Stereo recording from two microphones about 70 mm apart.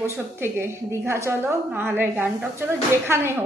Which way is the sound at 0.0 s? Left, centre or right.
Right.